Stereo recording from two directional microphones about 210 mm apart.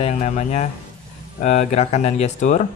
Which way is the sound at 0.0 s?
35° left (ahead or behind).